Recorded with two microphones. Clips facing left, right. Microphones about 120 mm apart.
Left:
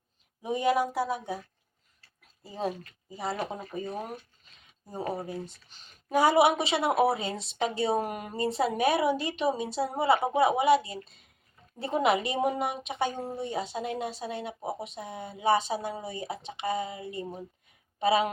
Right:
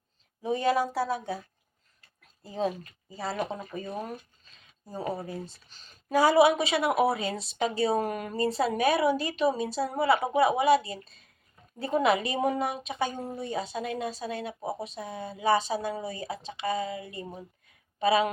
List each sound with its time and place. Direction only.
0.4 s speech: 15° left (ahead or behind)
2.4 s speech: 10° left (ahead or behind)
5.1 s a woman's voice: 20° left (ahead or behind)